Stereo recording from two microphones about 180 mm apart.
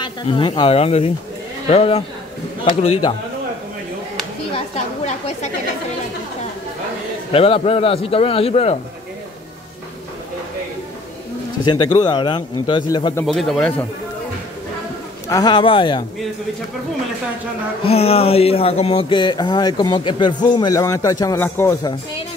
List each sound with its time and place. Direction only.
0.0 s a man's voice: 25° left (ahead or behind)
4.5 s a sound: 35° left (ahead or behind)
7.3 s a man's voice: 35° left (ahead or behind)
11.6 s speech: 25° left (ahead or behind)
13.2 s speech: centre (ahead or behind)
15.2 s speech: 20° left (ahead or behind)
17.8 s speech: 35° left (ahead or behind); by 21.9 s 15° left (ahead or behind)